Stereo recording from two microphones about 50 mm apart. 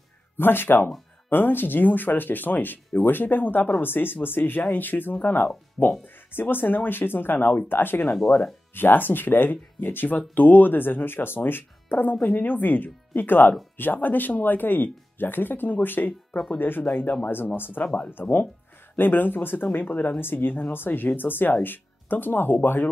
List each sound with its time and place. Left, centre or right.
0.4 s speech: left
16.9 s speech: left
17.6 s speech: left
18.9 s speech: left